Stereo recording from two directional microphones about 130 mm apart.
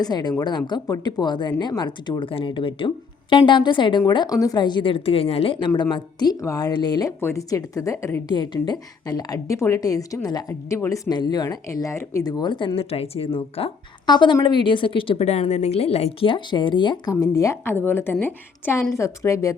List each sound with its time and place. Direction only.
0.0 s speech: 35° left (ahead or behind)
7.2 s a woman's voice: 20° left (ahead or behind); by 13.7 s 45° left (ahead or behind)
14.1 s a woman's voice: 35° left (ahead or behind)